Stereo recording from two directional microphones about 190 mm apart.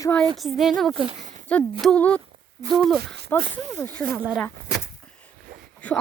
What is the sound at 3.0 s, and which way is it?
Speech, 60° right (ahead or behind).